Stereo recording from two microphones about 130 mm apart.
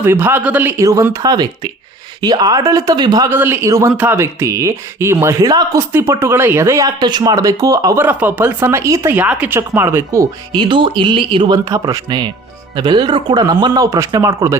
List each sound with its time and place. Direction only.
0.0 s speech: 15° right (ahead or behind)
0.8 s speech: 25° right (ahead or behind)
3.2 s speech: 15° right (ahead or behind)
8.0 s speech: 15° right (ahead or behind)
10.6 s speech: 40° right (ahead or behind)